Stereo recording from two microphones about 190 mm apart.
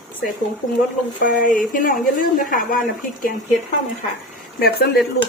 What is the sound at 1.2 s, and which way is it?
A woman's voice, 45° left (ahead or behind).